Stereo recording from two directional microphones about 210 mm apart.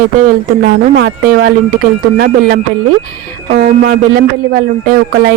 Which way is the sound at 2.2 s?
45° right (ahead or behind).